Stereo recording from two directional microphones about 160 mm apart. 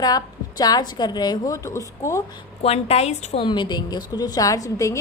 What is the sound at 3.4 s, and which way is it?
A woman's voice, 30° left (ahead or behind).